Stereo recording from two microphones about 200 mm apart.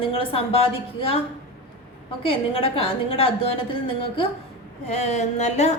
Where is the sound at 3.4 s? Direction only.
30° left (ahead or behind).